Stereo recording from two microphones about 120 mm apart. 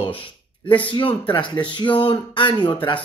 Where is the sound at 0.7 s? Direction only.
45° left (ahead or behind).